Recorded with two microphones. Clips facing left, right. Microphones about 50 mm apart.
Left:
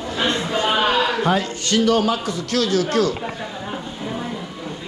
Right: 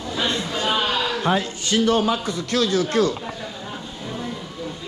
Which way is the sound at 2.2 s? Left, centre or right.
Right.